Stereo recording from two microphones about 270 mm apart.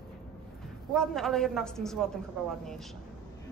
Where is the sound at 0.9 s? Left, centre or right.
Centre.